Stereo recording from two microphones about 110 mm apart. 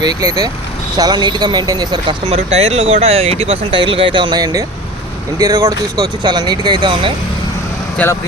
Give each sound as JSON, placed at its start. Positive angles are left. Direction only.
{"t": 0.0, "sound": "speech", "side_deg": -35}
{"t": 2.2, "sound": "speech", "side_deg": -70}
{"t": 8.0, "sound": "speech", "side_deg": 15}